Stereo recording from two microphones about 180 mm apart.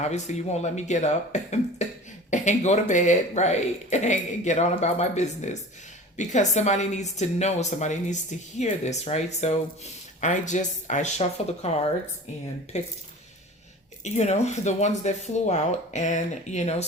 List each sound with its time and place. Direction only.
0.0 s a woman's voice: 40° left (ahead or behind)
14.0 s a woman's voice: 40° left (ahead or behind)